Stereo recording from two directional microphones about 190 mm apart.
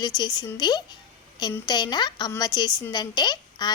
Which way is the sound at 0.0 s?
20° left (ahead or behind).